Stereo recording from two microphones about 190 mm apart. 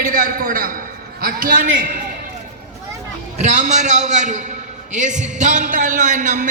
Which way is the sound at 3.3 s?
40° right (ahead or behind).